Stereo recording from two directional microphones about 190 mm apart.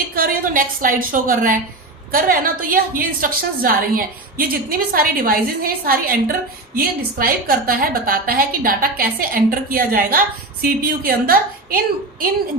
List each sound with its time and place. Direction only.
0.1 s a woman's voice: 50° right (ahead or behind)